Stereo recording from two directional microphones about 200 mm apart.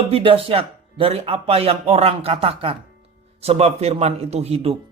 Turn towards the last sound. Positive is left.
turn(degrees=-30)  # may be behind; listen again after turning